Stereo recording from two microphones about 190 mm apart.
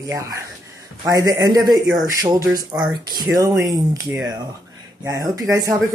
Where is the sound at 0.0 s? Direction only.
15° right (ahead or behind).